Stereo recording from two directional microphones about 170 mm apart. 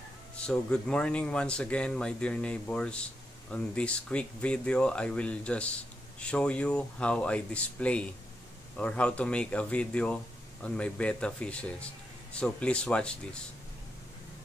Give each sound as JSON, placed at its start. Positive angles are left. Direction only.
{"t": 0.5, "sound": "speech", "side_deg": 5}